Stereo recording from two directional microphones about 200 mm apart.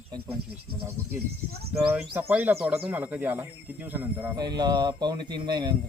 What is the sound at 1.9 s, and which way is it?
Speech, 10° right (ahead or behind).